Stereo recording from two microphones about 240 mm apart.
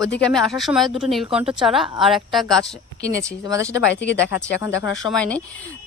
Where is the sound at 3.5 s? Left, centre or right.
Centre.